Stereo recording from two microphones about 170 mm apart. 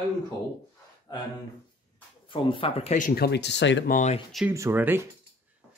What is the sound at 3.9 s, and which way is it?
Speech, 45° left (ahead or behind).